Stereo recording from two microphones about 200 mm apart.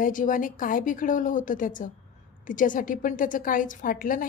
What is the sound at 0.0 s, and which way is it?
A woman's voice, 40° left (ahead or behind).